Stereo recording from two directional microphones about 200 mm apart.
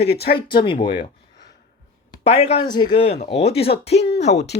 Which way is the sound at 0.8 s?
25° left (ahead or behind).